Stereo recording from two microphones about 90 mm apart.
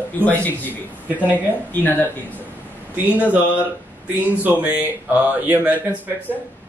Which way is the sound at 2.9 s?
15° right (ahead or behind).